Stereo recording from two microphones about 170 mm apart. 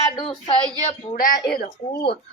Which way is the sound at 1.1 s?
50° left (ahead or behind).